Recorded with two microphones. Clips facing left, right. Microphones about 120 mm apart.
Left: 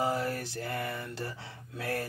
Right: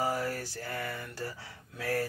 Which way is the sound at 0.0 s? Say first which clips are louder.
Left 1 dB; 20° left (ahead or behind).